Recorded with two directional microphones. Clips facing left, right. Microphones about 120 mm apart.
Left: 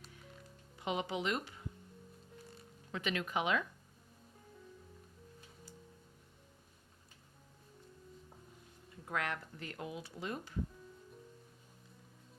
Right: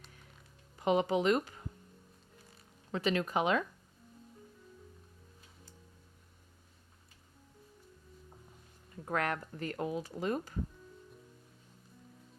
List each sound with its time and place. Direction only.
0.8 s speech: 45° right (ahead or behind)
2.9 s speech: 35° right (ahead or behind)
9.0 s speech: 45° right (ahead or behind)